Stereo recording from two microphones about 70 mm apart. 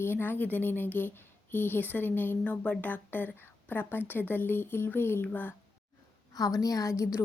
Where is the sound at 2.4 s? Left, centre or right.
Centre.